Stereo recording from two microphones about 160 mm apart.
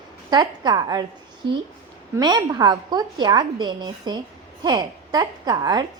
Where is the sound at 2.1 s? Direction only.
25° right (ahead or behind).